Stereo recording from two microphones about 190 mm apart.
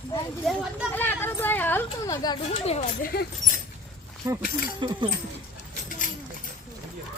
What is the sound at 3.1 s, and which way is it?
Speech, 55° left (ahead or behind).